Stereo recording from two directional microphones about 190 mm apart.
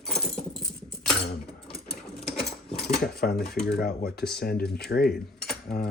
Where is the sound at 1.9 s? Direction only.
Centre (ahead or behind).